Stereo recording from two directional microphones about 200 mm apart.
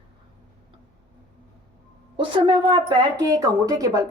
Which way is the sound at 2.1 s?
25° right (ahead or behind).